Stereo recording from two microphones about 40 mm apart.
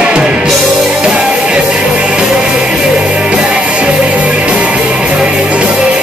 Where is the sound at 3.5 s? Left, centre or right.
Right.